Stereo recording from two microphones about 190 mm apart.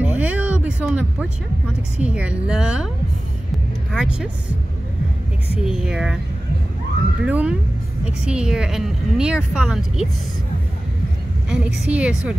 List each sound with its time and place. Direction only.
0.0 s a sound: 10° right (ahead or behind)
2.0 s a woman's voice: 5° right (ahead or behind)
3.9 s a woman's voice: 5° right (ahead or behind)
5.5 s a woman's voice: 5° right (ahead or behind)
7.2 s a woman's voice: 5° right (ahead or behind)
11.5 s a woman's voice: 5° right (ahead or behind)